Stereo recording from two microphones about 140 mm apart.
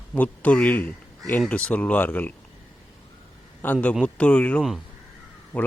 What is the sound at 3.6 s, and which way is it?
Speech, 10° left (ahead or behind).